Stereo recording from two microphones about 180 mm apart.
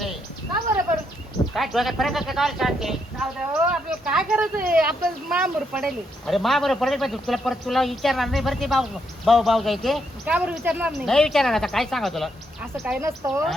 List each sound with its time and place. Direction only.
1.5 s speech: centre (ahead or behind)
13.0 s speech: 15° right (ahead or behind)